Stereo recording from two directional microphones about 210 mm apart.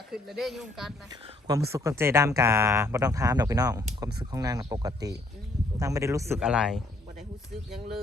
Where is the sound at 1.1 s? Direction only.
25° right (ahead or behind).